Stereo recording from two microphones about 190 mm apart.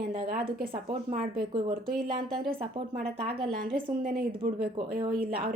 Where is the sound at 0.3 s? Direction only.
50° right (ahead or behind).